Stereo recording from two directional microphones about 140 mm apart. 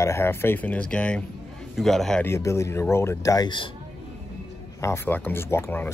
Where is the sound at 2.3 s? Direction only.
20° left (ahead or behind).